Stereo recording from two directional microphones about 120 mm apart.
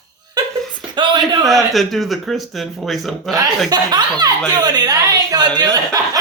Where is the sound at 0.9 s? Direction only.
40° right (ahead or behind).